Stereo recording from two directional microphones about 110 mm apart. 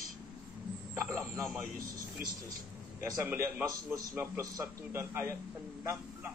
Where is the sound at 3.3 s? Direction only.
20° right (ahead or behind).